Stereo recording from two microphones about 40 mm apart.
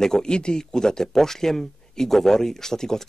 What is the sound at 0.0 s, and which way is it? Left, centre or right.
Speech, centre.